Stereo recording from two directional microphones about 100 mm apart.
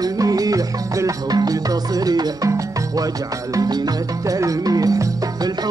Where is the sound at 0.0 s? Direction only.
40° right (ahead or behind).